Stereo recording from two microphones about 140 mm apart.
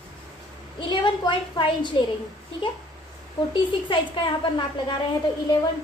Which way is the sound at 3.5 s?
35° left (ahead or behind).